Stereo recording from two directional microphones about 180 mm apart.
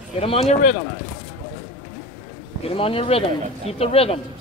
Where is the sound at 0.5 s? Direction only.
45° left (ahead or behind).